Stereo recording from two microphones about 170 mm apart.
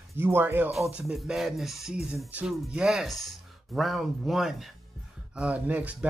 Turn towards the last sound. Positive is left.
turn(degrees=-10)  # may be behind; listen again after turning